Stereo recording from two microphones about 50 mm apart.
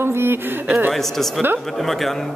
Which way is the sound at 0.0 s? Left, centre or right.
Right.